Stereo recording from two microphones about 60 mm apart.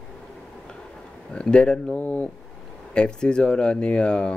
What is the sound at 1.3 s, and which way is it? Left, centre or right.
Speech, centre.